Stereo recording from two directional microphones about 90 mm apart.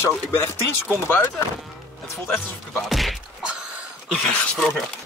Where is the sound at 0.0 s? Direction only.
25° left (ahead or behind).